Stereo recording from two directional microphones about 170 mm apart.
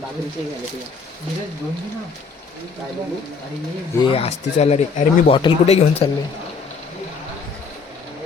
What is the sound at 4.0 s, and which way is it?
Speech, 35° left (ahead or behind).